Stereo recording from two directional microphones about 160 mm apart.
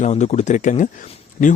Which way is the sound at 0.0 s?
45° left (ahead or behind).